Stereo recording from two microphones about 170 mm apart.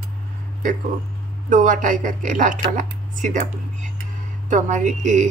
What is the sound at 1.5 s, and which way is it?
Speech, 50° right (ahead or behind).